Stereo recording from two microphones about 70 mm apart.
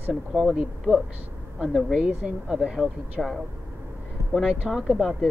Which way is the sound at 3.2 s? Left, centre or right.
Centre.